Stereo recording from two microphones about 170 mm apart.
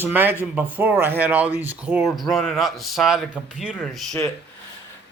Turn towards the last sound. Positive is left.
turn(degrees=5)  # may be behind; listen again after turning